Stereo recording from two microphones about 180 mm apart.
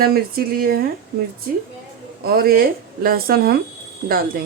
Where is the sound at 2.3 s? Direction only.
55° right (ahead or behind).